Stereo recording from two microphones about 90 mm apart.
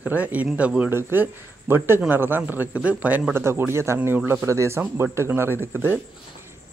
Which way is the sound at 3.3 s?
25° right (ahead or behind).